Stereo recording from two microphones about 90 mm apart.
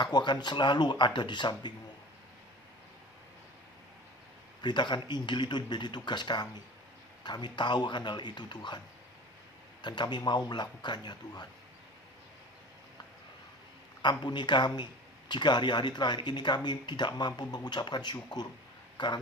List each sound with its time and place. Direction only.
0.0 s speech: 60° left (ahead or behind)
4.6 s speech: 60° left (ahead or behind)
9.8 s speech: 55° left (ahead or behind)
14.0 s a man's voice: 55° left (ahead or behind)